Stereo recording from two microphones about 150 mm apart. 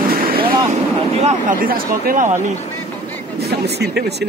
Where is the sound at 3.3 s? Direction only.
90° right.